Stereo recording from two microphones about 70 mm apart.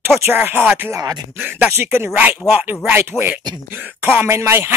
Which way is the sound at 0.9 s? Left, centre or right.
Right.